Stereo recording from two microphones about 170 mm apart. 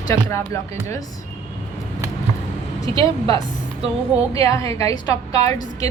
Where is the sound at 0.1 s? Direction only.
15° left (ahead or behind).